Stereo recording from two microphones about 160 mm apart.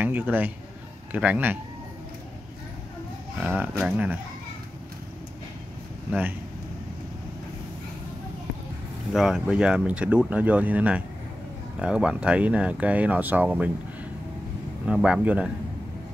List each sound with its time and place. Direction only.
0.0 s a man's voice: 10° right (ahead or behind)
3.3 s speech: 10° right (ahead or behind)
9.1 s speech: centre (ahead or behind)
14.9 s speech: 5° right (ahead or behind)